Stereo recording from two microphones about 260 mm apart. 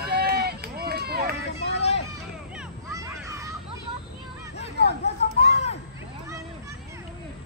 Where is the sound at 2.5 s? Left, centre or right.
Centre.